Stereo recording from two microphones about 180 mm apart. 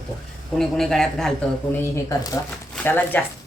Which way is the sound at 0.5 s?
5° left (ahead or behind).